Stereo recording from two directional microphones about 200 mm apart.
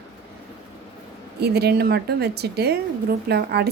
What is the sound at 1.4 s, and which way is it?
Speech, 55° right (ahead or behind).